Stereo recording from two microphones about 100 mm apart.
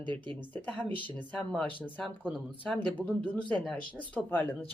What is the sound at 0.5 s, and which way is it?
Speech, 15° left (ahead or behind).